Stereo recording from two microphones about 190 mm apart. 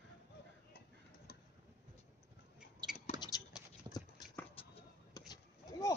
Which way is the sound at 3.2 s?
20° left (ahead or behind).